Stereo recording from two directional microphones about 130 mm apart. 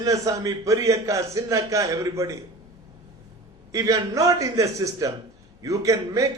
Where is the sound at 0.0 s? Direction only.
25° right (ahead or behind).